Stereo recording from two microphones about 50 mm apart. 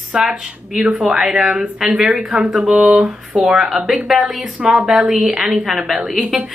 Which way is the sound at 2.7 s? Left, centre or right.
Right.